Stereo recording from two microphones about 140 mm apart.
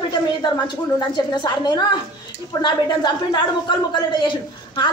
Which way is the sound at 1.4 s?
30° left (ahead or behind).